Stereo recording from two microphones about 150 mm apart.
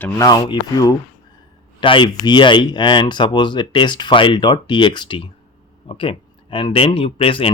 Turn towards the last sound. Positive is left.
turn(degrees=40)  # may be behind; listen again after turning